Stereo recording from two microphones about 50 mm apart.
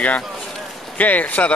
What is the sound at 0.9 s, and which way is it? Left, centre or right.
Speech, left.